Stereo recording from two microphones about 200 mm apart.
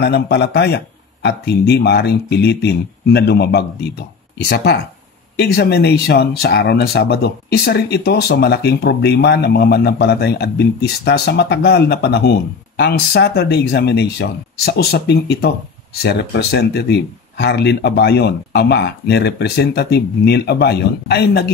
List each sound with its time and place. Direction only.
0.0 s speech: 55° left (ahead or behind)
5.3 s speech: 55° left (ahead or behind)